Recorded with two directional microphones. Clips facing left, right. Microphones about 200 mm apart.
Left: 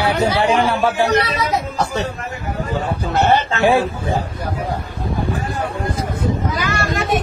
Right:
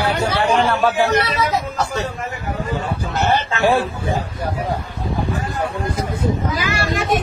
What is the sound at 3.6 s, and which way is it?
Speech, 15° left (ahead or behind).